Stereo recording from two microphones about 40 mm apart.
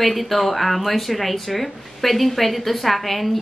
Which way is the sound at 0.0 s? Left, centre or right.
Centre.